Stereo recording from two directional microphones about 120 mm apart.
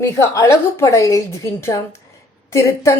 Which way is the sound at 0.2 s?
25° left (ahead or behind).